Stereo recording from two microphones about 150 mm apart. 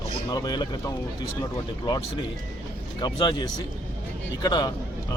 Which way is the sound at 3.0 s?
30° left (ahead or behind).